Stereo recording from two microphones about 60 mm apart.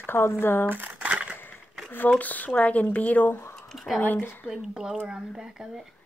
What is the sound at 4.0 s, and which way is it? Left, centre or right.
Speech, left.